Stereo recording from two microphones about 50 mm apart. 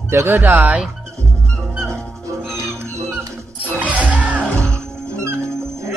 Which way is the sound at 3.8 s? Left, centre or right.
Right.